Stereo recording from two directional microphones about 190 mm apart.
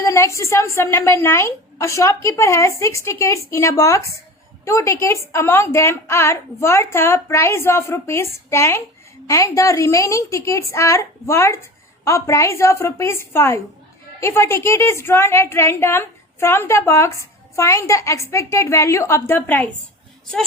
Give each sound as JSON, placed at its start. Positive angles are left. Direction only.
{"t": 0.0, "sound": "a woman's voice", "side_deg": 15}